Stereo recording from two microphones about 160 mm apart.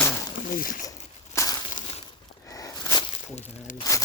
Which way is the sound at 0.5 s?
55° left (ahead or behind).